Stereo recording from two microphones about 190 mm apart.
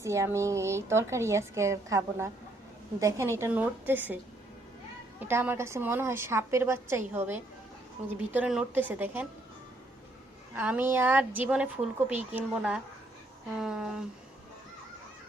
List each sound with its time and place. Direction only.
0.0 s a woman's voice: 15° right (ahead or behind)
5.2 s a woman's voice: 10° right (ahead or behind)
10.5 s a woman's voice: 10° right (ahead or behind)